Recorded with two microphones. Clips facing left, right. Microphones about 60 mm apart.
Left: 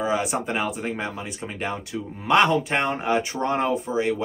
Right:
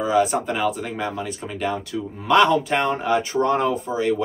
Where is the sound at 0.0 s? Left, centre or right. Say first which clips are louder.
Right 5 dB; left.